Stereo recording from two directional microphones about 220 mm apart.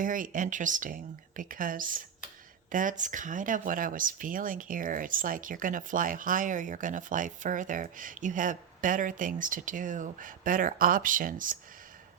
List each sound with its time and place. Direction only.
0.0 s speech: 35° right (ahead or behind)